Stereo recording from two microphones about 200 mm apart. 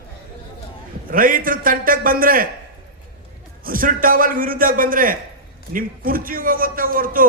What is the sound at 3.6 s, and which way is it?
A man's voice, 45° right (ahead or behind).